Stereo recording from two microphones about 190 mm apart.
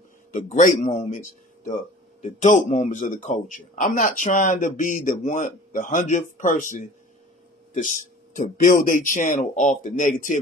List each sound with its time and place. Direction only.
0.3 s a man's voice: 40° left (ahead or behind)